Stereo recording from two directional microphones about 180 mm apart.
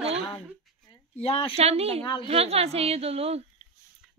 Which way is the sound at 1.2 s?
35° left (ahead or behind).